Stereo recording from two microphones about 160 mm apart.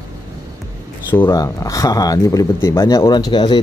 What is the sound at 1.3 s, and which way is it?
Speech, 20° left (ahead or behind).